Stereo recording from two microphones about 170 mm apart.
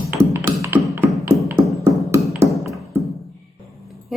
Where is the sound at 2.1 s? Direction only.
15° right (ahead or behind).